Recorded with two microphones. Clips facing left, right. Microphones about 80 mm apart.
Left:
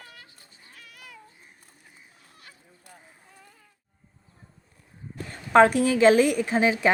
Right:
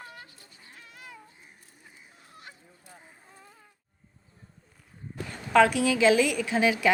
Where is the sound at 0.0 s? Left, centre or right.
Right.